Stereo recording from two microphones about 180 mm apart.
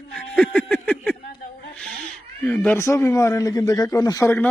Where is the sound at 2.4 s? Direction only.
10° left (ahead or behind).